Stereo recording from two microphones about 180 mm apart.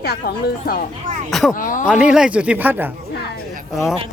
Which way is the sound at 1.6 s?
45° left (ahead or behind).